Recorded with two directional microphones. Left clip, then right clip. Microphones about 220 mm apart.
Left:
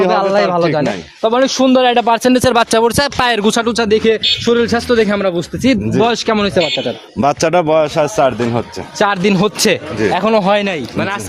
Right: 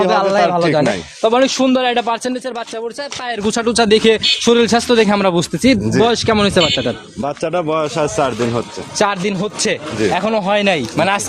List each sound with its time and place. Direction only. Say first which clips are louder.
0.1 s speech: left 1 dB; 15° left (ahead or behind)
1.7 s a man's voice: left 5 dB; 30° left (ahead or behind)
2.4 s speech: left 12 dB; 50° left (ahead or behind)
3.4 s speech: left 3 dB; 20° left (ahead or behind)
3.8 s a man's voice: right 1 dB; 10° right (ahead or behind)
5.6 s speech: even; 10° left (ahead or behind)
6.4 s a man's voice: right 1 dB; 10° right (ahead or behind)
7.2 s a man's voice: left 8 dB; 50° left (ahead or behind)
10.0 s speech: right 1 dB; 20° left (ahead or behind)
10.2 s a man's voice: left 5 dB; 35° left (ahead or behind)
10.7 s speech: right 4 dB; 20° right (ahead or behind)